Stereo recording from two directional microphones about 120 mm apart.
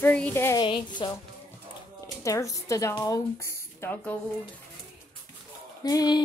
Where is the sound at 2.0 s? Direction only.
25° left (ahead or behind).